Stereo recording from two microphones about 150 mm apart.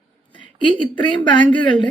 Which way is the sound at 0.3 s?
35° left (ahead or behind).